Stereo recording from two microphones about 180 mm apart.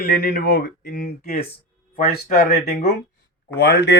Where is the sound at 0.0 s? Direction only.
55° left (ahead or behind).